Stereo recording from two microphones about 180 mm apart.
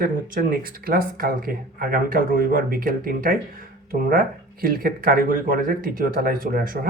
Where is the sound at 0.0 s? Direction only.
55° right (ahead or behind).